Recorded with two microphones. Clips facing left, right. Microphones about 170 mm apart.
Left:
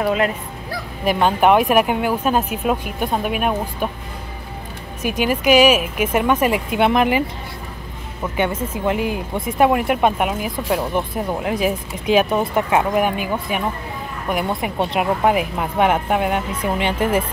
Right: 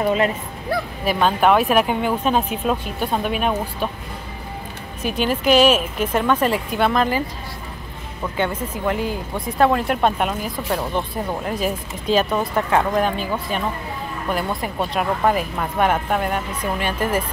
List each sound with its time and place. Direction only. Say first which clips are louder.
0.0 s speech: even; centre (ahead or behind)
1.0 s speech: left 2 dB; 15° left (ahead or behind)
5.0 s speech: left 1 dB; 10° left (ahead or behind)